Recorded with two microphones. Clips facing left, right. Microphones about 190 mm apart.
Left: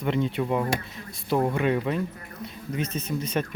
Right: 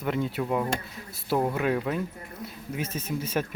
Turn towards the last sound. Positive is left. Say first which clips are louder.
# left 1 dB
turn(degrees=-5)  # may be behind; listen again after turning